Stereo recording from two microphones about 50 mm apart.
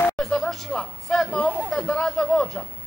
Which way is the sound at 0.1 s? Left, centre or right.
Centre.